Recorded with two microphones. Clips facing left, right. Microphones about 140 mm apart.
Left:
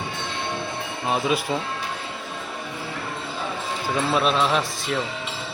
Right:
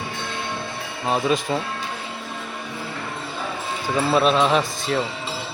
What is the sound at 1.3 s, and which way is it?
Speech, 5° left (ahead or behind).